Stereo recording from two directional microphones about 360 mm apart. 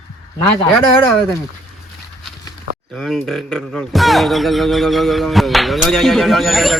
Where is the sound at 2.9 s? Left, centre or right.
Centre.